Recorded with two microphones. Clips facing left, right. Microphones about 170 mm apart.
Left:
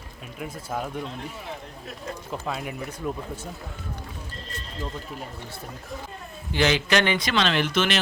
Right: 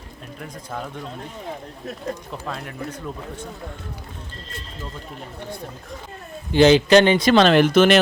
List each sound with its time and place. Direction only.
0.3 s speech: 5° left (ahead or behind)
2.3 s speech: 5° left (ahead or behind)
6.5 s speech: 30° right (ahead or behind)
7.3 s speech: 50° right (ahead or behind)